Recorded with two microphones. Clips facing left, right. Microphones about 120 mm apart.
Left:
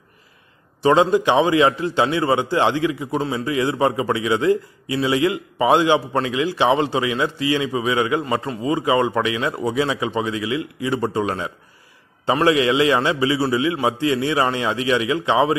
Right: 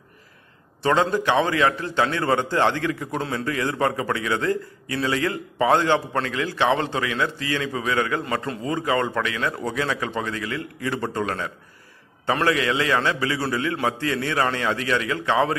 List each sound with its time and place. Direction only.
0.8 s a man's voice: 15° left (ahead or behind)